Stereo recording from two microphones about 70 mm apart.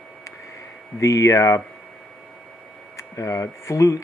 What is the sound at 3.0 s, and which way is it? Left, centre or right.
Speech, left.